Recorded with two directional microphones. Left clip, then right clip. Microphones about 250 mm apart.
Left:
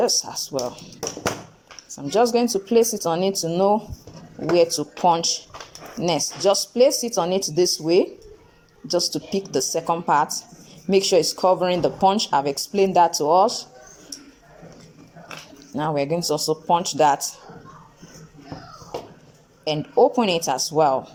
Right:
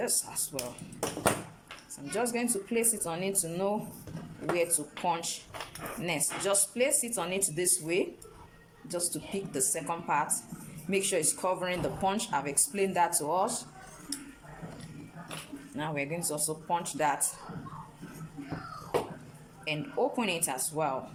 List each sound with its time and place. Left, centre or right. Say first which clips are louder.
0.2 s speech: left 12 dB; left
2.1 s speech: left 13 dB; left
15.7 s speech: left 12 dB; left
19.6 s speech: left 13 dB; left